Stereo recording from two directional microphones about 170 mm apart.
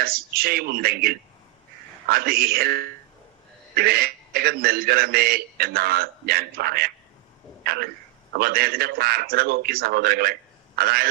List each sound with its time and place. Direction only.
0.0 s a man's voice: 60° right (ahead or behind)